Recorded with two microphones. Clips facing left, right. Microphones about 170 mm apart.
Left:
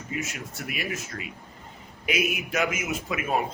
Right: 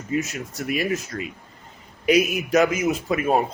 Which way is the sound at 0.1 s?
35° right (ahead or behind).